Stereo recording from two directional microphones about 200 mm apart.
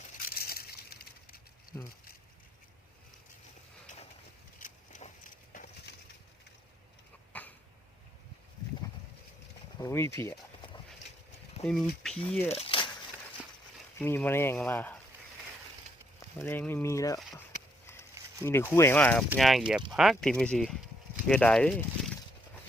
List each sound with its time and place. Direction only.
0.3 s a sound: 50° left (ahead or behind)
4.6 s a sound: 35° left (ahead or behind)
7.3 s cough: 5° left (ahead or behind)
9.7 s speech: 15° left (ahead or behind)
11.6 s speech: 5° left (ahead or behind)
12.5 s a sound: 30° left (ahead or behind)
14.0 s speech: 10° left (ahead or behind)
16.4 s speech: 10° left (ahead or behind)
18.4 s speech: 10° left (ahead or behind)